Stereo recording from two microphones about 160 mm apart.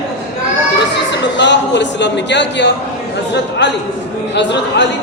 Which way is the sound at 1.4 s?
90° left.